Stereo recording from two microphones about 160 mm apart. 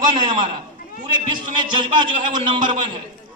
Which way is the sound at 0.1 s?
35° right (ahead or behind).